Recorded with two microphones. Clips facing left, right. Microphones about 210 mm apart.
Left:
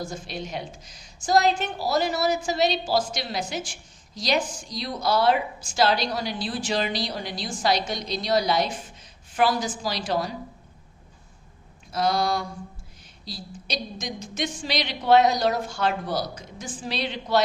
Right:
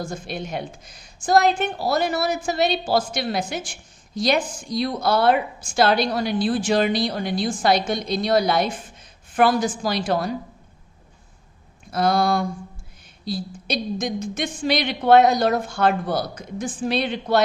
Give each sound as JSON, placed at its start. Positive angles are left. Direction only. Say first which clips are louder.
{"t": 0.0, "sound": "a woman's voice", "louder": "right 3 dB", "side_deg": -55}
{"t": 11.9, "sound": "a woman's voice", "louder": "right 4 dB", "side_deg": -55}